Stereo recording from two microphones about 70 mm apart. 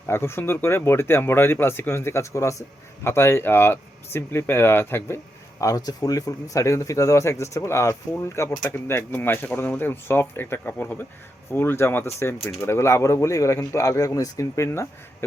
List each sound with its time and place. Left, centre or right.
0.1 s speech: left
3.0 s speech: left
5.5 s speech: left